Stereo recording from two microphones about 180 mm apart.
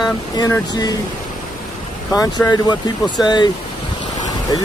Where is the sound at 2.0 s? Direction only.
20° left (ahead or behind).